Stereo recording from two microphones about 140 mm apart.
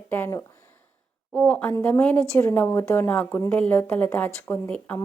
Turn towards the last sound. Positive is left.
turn(degrees=10)  # may be behind; listen again after turning